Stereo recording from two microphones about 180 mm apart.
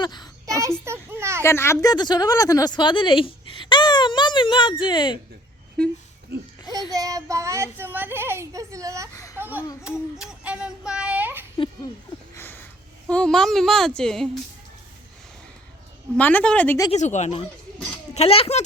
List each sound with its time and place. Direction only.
0.0 s a child's voice: 25° left (ahead or behind)
0.5 s speech: 15° right (ahead or behind)
1.5 s speech: 15° left (ahead or behind)
5.8 s speech: 5° left (ahead or behind)
6.9 s speech: 20° right (ahead or behind)
9.1 s a sound: 20° left (ahead or behind)
9.4 s a sound: 10° right (ahead or behind)
12.4 s a sound: 10° left (ahead or behind)
13.1 s speech: 5° left (ahead or behind)
16.1 s a woman's voice: 10° left (ahead or behind)
16.9 s speech: 40° left (ahead or behind)